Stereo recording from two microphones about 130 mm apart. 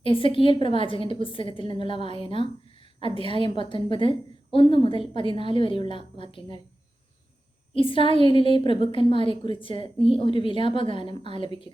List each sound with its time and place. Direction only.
0.0 s a woman's voice: 45° left (ahead or behind)
7.7 s a woman's voice: 45° left (ahead or behind)